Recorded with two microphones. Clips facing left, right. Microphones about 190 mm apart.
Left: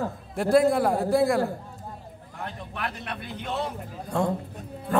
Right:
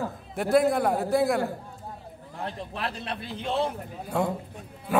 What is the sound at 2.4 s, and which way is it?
A man's voice, 30° right (ahead or behind).